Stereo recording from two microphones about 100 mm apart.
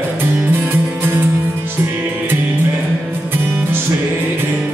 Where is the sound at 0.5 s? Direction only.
25° right (ahead or behind).